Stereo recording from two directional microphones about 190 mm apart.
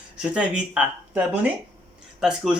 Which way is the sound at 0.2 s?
5° right (ahead or behind).